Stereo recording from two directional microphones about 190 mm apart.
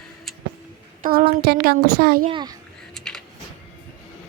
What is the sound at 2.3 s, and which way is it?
Speech, 20° right (ahead or behind).